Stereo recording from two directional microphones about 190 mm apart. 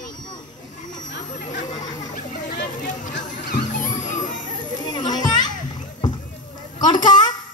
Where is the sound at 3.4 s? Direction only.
40° left (ahead or behind).